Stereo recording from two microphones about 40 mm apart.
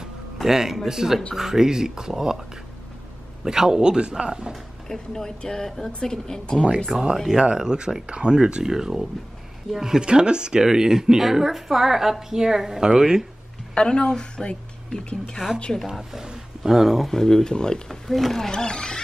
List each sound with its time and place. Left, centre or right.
0.4 s a man's voice: centre
3.4 s a man's voice: centre
4.8 s speech: centre
6.9 s a woman's voice: centre
8.7 s a woman's voice: centre
10.0 s a man's voice: right
13.7 s a woman's voice: left
15.9 s speech: centre
17.1 s speech: centre
17.8 s speech: centre
18.5 s speech: centre